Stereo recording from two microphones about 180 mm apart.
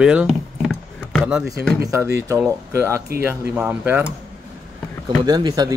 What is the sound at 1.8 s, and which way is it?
Speech, 15° right (ahead or behind).